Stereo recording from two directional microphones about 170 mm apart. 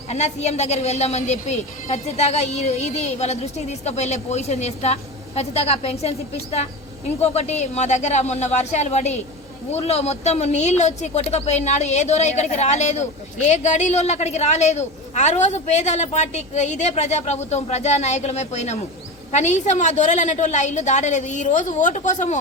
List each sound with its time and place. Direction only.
0.1 s a woman's voice: 40° left (ahead or behind)